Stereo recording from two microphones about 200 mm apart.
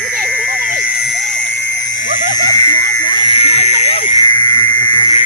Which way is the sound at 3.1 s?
25° left (ahead or behind).